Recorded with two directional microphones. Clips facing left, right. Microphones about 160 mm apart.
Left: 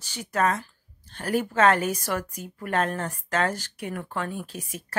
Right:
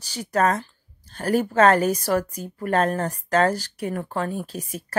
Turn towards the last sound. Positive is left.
turn(degrees=-35)  # may be behind; listen again after turning